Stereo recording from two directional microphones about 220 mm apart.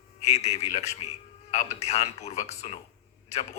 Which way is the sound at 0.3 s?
30° left (ahead or behind).